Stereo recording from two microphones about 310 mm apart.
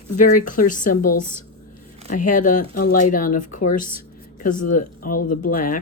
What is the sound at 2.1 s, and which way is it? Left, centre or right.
Speech, left.